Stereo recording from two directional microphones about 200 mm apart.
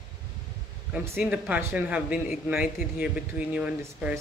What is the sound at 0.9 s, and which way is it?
Speech, 10° right (ahead or behind).